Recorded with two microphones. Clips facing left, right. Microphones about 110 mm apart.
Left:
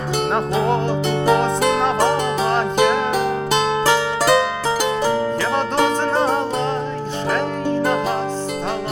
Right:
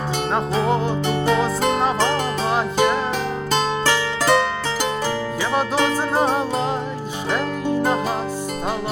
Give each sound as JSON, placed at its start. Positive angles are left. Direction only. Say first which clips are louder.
{"t": 0.5, "sound": "music", "louder": "even", "side_deg": 0}
{"t": 3.5, "sound": "music", "louder": "left 2 dB", "side_deg": 10}
{"t": 5.5, "sound": "music", "louder": "even", "side_deg": -5}